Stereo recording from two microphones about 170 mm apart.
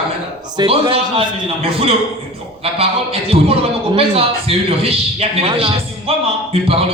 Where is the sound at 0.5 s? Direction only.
30° right (ahead or behind).